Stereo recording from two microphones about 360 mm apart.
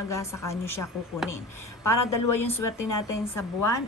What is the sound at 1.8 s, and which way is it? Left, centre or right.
Speech, left.